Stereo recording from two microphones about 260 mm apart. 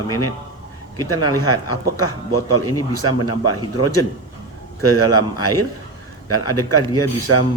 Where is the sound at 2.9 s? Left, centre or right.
Left.